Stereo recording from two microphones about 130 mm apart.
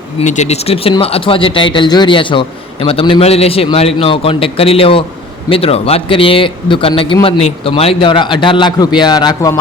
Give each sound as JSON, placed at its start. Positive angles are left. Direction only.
{"t": 0.3, "sound": "a man's voice", "side_deg": 60}